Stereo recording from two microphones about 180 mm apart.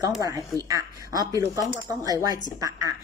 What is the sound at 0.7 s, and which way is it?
A woman's voice, 20° right (ahead or behind).